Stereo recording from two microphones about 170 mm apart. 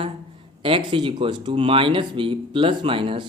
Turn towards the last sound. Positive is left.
turn(degrees=-30)  # may be behind; listen again after turning